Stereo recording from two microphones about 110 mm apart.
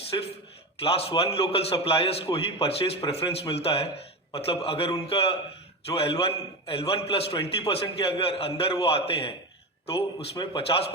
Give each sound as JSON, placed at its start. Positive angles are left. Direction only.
{"t": 0.1, "sound": "a man's voice", "side_deg": 40}
{"t": 0.8, "sound": "a man's voice", "side_deg": 60}